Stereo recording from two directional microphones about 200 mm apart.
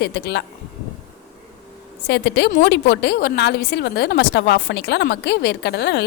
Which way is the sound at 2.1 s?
55° left (ahead or behind).